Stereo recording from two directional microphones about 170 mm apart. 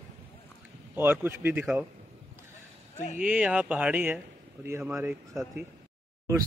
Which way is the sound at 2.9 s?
45° left (ahead or behind).